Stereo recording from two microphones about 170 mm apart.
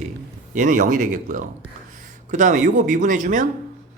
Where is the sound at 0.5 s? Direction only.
50° right (ahead or behind).